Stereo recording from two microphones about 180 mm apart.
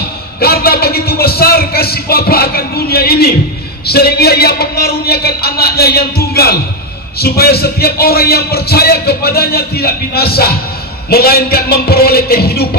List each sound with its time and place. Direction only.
0.4 s a man's voice: 60° left (ahead or behind)